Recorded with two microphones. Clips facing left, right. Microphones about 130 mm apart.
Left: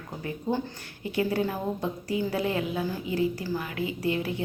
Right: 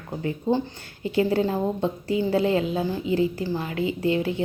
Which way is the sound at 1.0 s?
30° right (ahead or behind).